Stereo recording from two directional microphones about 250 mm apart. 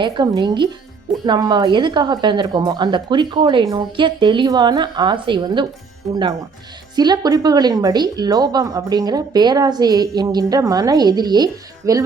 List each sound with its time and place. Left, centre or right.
0.0 s speech: centre
6.9 s speech: centre